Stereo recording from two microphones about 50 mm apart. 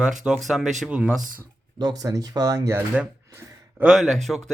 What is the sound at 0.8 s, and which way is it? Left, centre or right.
Music, right.